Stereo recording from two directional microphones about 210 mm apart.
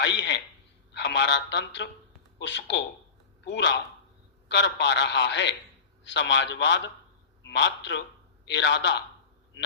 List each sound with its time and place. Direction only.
0.0 s a man's voice: 55° left (ahead or behind)